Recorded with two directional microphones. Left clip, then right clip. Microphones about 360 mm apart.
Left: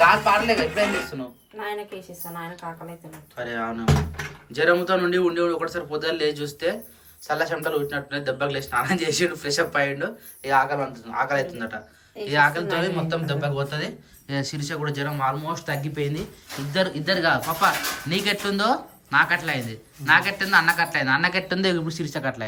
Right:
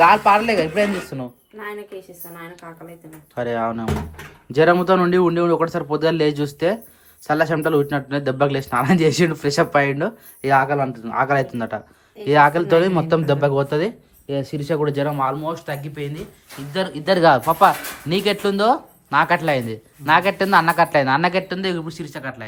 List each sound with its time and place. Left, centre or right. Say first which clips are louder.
0.0 s speech: right 4 dB; centre
3.3 s speech: right 7 dB; centre